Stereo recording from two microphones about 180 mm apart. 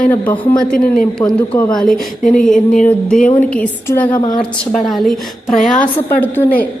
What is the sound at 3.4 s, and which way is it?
Speech, 10° left (ahead or behind).